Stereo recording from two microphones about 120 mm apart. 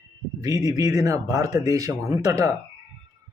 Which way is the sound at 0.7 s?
30° right (ahead or behind).